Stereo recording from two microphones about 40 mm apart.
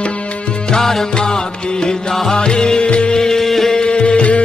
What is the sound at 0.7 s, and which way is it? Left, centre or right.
Music, centre.